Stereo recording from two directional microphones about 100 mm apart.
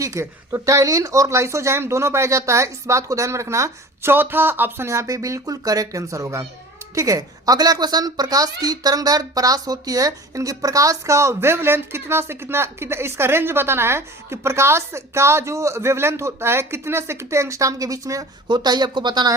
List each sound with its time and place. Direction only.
0.0 s a woman's voice: 30° right (ahead or behind)
18.4 s speech: 45° right (ahead or behind)